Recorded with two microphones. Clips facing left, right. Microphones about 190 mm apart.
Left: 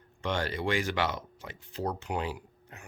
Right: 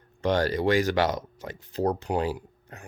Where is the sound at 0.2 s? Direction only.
40° right (ahead or behind).